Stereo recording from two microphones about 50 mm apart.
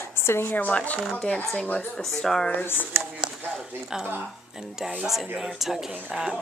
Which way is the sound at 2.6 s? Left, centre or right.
Left.